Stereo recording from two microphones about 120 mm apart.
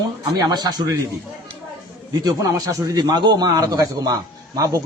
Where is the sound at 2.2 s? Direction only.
30° right (ahead or behind).